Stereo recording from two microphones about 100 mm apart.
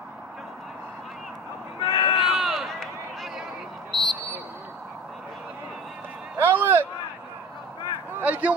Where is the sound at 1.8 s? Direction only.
60° left (ahead or behind).